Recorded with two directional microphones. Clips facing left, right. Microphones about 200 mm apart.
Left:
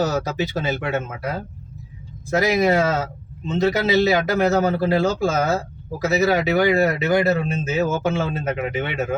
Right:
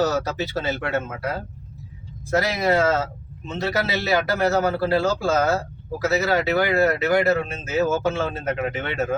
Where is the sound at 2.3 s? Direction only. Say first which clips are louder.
Left 3 dB; 15° left (ahead or behind).